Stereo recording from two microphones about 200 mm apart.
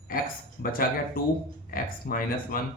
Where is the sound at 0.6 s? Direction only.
45° left (ahead or behind).